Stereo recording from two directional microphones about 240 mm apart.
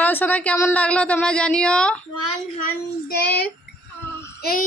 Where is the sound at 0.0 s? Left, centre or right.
Centre.